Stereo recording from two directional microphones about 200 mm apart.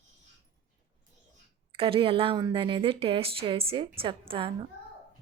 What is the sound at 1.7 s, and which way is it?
A woman's voice, 25° right (ahead or behind).